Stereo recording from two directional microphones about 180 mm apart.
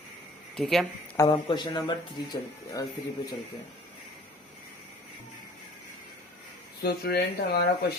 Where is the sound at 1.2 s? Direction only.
25° left (ahead or behind).